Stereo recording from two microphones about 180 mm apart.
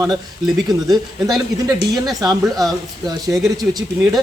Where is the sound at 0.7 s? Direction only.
20° right (ahead or behind).